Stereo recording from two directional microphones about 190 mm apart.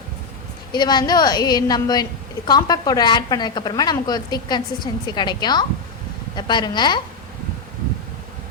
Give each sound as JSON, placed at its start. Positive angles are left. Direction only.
{"t": 0.7, "sound": "a woman's voice", "side_deg": 20}